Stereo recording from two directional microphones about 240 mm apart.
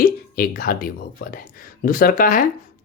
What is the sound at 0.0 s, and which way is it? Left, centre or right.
Speech, left.